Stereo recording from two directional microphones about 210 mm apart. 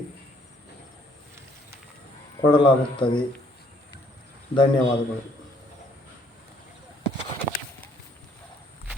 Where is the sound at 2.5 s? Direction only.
20° left (ahead or behind).